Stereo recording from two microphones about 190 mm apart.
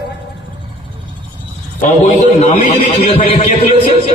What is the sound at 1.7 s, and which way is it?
A man's voice, 40° left (ahead or behind).